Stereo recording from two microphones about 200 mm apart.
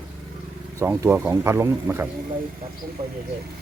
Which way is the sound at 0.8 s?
10° right (ahead or behind).